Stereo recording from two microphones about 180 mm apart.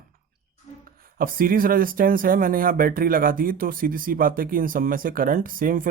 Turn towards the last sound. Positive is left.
turn(degrees=-50)  # may be behind; listen again after turning